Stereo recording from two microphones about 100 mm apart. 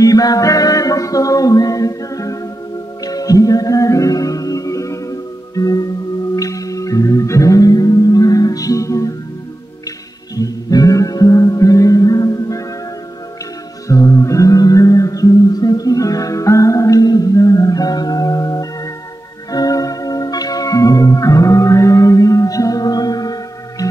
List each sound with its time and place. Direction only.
0.0 s music: 35° left (ahead or behind)
10.3 s music: 35° left (ahead or behind)
13.8 s music: 30° left (ahead or behind)